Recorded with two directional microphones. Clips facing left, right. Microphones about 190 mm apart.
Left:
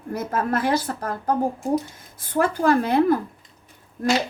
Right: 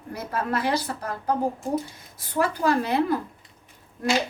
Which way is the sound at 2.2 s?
50° left (ahead or behind).